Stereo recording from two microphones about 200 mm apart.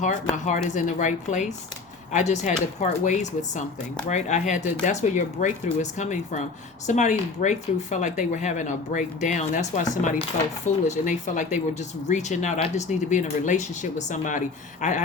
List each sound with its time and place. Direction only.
0.0 s speech: 40° left (ahead or behind)